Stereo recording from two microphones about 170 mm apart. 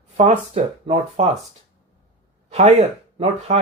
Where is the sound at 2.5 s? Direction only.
40° right (ahead or behind).